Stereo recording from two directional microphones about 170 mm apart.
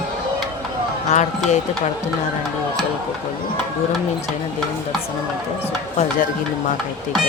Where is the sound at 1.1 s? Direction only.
45° left (ahead or behind).